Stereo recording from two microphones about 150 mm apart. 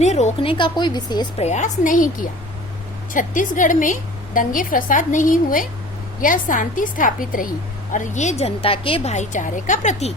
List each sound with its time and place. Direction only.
0.0 s a woman's voice: 50° left (ahead or behind)
0.5 s a woman's voice: 30° left (ahead or behind)
1.4 s a woman's voice: 50° left (ahead or behind)
7.9 s a woman's voice: 55° left (ahead or behind); by 9.1 s 35° left (ahead or behind)
9.1 s a woman's voice: 60° left (ahead or behind)